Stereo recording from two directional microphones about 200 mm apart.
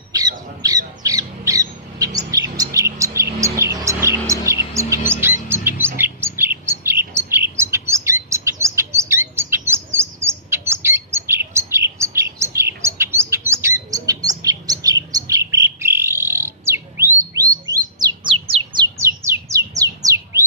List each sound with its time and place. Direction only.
0.1 s squawk: 20° right (ahead or behind)
3.3 s music: 15° right (ahead or behind)
5.5 s chirp: 10° right (ahead or behind)
17.9 s bird: 20° right (ahead or behind)
19.8 s squawk: 15° right (ahead or behind)